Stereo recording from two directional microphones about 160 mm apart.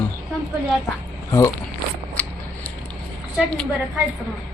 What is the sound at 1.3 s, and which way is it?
Speech, 20° left (ahead or behind).